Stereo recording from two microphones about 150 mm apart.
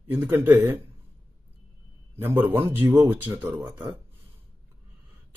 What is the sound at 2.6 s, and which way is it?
Speech, 15° right (ahead or behind).